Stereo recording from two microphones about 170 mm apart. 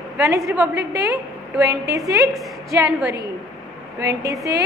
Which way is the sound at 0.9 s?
15° right (ahead or behind).